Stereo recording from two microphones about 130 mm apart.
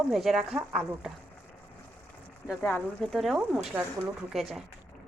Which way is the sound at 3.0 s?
Centre (ahead or behind).